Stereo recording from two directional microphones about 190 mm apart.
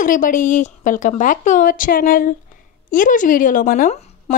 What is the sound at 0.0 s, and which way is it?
A woman's voice, 45° left (ahead or behind).